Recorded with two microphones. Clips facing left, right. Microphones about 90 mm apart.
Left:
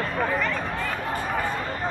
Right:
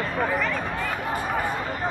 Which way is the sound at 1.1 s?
10° right (ahead or behind).